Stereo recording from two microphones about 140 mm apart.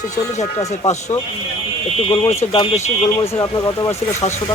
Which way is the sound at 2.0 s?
45° left (ahead or behind).